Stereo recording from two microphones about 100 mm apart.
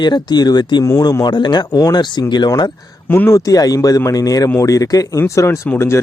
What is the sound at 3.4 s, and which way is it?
Speech, 35° left (ahead or behind).